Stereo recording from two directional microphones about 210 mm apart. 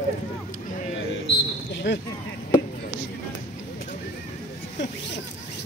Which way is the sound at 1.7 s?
55° left (ahead or behind).